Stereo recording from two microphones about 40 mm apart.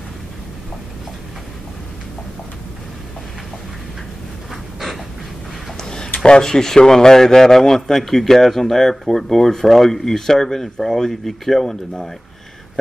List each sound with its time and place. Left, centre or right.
4.7 s dog: centre
5.8 s a sound: centre
6.2 s a man's voice: centre